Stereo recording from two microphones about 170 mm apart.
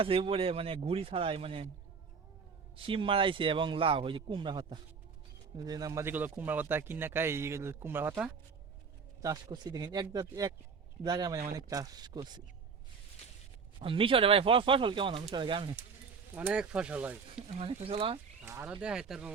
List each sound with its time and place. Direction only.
0.0 s a man's voice: 30° right (ahead or behind)
2.7 s a man's voice: 30° right (ahead or behind); by 8.3 s 10° right (ahead or behind)
9.2 s speech: 20° right (ahead or behind)
13.7 s a man's voice: 30° right (ahead or behind)
16.3 s speech: 10° right (ahead or behind)
17.3 s a man's voice: 35° right (ahead or behind)
18.4 s speech: 10° right (ahead or behind)